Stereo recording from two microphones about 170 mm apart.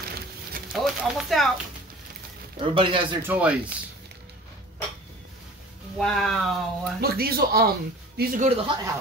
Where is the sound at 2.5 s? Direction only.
30° right (ahead or behind).